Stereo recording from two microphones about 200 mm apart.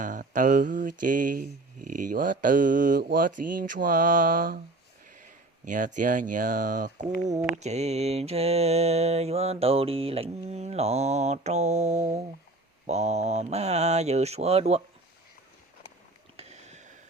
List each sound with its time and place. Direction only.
0.0 s mantra: 40° right (ahead or behind)
5.6 s mantra: 40° right (ahead or behind)
16.4 s a sound: 35° right (ahead or behind)